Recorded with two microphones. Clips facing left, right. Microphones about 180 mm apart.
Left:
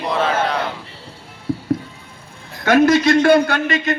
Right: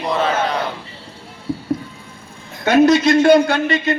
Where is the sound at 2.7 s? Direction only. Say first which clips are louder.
Right 1 dB; 20° right (ahead or behind).